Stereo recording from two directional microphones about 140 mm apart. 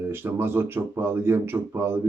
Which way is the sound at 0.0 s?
15° right (ahead or behind).